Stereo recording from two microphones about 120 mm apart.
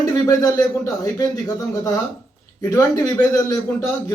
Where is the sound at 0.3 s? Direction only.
30° left (ahead or behind).